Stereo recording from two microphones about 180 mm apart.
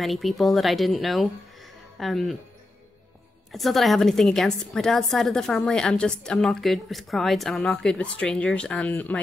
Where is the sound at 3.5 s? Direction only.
Centre (ahead or behind).